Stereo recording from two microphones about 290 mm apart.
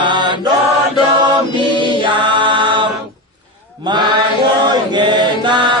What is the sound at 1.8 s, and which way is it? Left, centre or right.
Music, centre.